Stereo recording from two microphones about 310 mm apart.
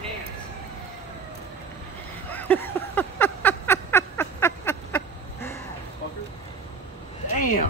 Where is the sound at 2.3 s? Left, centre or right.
Centre.